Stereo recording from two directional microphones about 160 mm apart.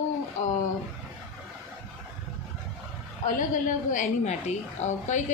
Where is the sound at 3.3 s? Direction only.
55° left (ahead or behind).